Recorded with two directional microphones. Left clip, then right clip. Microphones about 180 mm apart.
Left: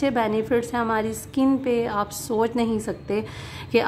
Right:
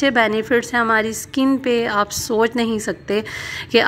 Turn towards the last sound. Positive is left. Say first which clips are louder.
# right 6 dB
turn(degrees=-15)  # may be behind; listen again after turning